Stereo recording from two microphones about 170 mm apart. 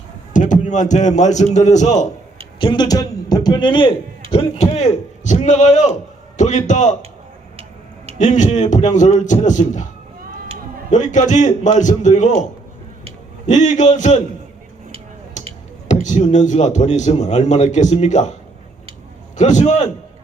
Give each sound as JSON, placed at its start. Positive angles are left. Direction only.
{"t": 0.3, "sound": "a man's voice", "side_deg": 50}
{"t": 2.6, "sound": "a man's voice", "side_deg": 30}
{"t": 8.2, "sound": "a man's voice", "side_deg": 45}
{"t": 10.9, "sound": "a man's voice", "side_deg": 45}
{"t": 13.5, "sound": "a man's voice", "side_deg": 45}
{"t": 15.4, "sound": "a sound", "side_deg": 45}
{"t": 15.9, "sound": "a man's voice", "side_deg": 45}
{"t": 19.4, "sound": "a man's voice", "side_deg": 45}